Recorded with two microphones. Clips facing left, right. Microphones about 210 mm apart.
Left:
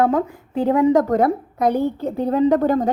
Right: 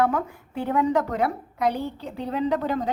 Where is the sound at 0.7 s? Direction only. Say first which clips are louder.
Left 7 dB; 35° left (ahead or behind).